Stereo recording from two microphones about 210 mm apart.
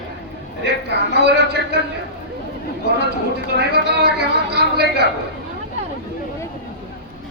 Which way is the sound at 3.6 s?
50° right (ahead or behind).